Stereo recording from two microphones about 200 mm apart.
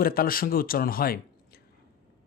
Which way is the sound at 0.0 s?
45° left (ahead or behind).